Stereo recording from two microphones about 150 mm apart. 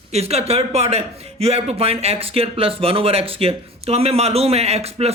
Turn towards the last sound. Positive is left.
turn(degrees=-45)  # may be behind; listen again after turning